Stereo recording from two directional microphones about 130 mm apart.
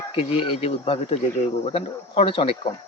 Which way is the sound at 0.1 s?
45° left (ahead or behind).